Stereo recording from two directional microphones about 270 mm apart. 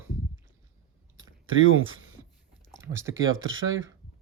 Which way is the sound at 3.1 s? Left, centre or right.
Right.